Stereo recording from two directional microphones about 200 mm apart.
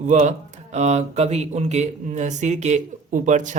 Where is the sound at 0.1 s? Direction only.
35° right (ahead or behind).